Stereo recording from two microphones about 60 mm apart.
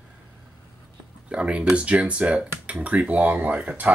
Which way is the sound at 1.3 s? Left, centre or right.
Centre.